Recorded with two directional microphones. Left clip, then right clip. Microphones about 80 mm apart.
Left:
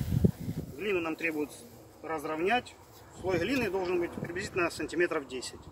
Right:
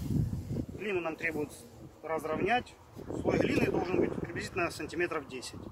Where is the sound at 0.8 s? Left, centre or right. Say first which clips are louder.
Left 3 dB; right.